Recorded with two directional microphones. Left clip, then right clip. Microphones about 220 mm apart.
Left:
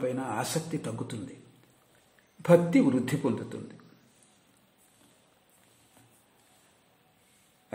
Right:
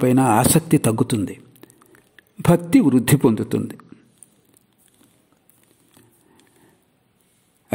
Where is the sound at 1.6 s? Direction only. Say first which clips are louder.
Right 15 dB; 45° right (ahead or behind).